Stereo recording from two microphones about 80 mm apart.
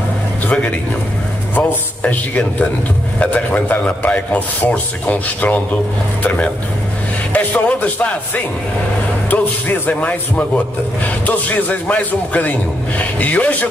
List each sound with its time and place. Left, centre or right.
0.5 s a man's voice: centre
7.3 s music: centre
9.3 s a man's voice: left